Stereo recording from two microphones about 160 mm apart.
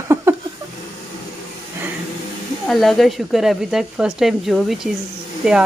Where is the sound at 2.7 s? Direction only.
Centre (ahead or behind).